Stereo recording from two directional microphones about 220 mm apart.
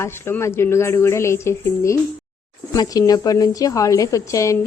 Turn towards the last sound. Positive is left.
turn(degrees=15)  # may be behind; listen again after turning